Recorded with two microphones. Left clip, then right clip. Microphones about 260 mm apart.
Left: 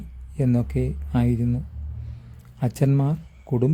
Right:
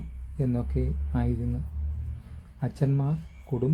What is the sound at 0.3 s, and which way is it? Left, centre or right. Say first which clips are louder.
Speech: left 6 dB; left.